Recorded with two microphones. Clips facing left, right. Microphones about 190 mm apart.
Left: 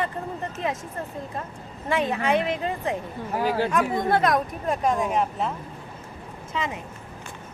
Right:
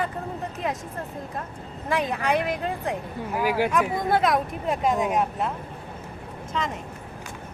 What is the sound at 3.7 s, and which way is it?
Speech, centre (ahead or behind).